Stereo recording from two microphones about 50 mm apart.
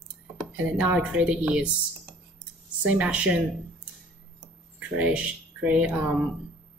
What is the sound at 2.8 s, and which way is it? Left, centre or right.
Speech, right.